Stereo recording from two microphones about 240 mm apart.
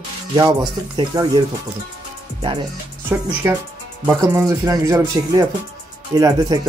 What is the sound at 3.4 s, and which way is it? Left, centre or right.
Speech, centre.